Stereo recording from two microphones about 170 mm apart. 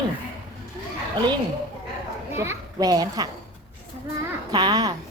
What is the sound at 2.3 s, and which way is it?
Speech, 15° right (ahead or behind).